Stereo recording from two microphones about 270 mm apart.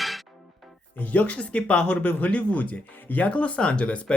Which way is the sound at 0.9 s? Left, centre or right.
Centre.